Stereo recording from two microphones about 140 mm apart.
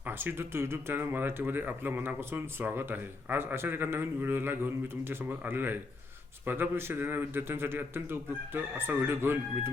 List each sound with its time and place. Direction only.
0.0 s speech: 15° right (ahead or behind)